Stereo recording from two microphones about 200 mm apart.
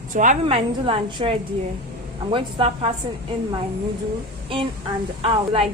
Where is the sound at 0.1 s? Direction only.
40° right (ahead or behind).